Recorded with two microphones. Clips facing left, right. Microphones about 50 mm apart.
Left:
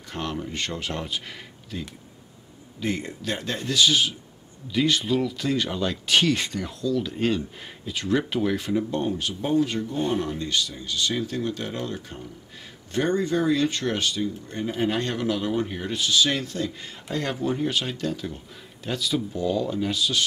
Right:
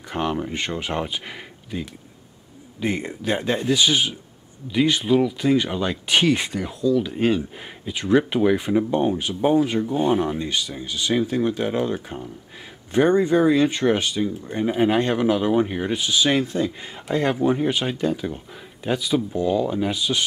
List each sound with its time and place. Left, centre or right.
0.1 s speech: centre